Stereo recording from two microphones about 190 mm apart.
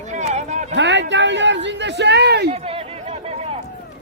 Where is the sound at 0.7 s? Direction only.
70° right (ahead or behind).